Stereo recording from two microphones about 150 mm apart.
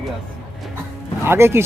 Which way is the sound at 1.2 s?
15° right (ahead or behind).